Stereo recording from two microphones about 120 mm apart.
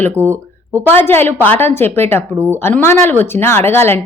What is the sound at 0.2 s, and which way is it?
Speech, 25° right (ahead or behind).